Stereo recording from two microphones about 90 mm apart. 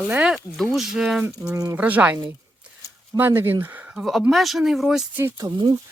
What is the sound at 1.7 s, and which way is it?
Speech, 15° right (ahead or behind).